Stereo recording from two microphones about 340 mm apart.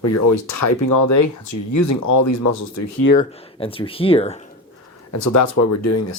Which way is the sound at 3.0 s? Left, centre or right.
Left.